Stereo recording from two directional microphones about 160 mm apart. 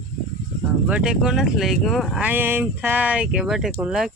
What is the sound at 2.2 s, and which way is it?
Speech, 10° right (ahead or behind).